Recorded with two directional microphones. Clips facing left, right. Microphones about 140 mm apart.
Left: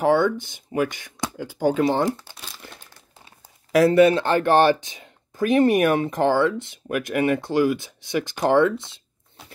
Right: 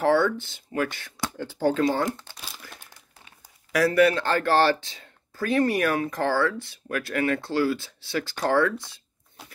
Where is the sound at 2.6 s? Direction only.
25° left (ahead or behind).